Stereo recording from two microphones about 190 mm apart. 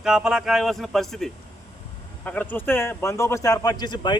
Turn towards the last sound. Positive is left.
turn(degrees=20)  # may be behind; listen again after turning